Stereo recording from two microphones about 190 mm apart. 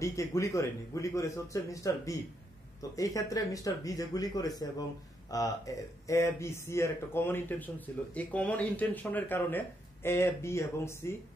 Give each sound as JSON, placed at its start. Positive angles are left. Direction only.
{"t": 0.0, "sound": "speech", "side_deg": 15}